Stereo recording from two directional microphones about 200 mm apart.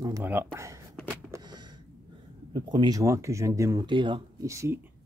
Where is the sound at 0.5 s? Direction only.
15° right (ahead or behind).